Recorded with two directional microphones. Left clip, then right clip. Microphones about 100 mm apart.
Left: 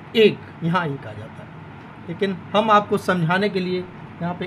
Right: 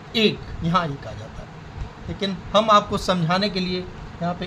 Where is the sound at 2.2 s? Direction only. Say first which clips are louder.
Even; 45° left (ahead or behind).